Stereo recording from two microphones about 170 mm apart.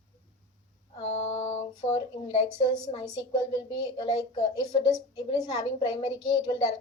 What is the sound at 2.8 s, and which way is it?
A woman's voice, 20° left (ahead or behind).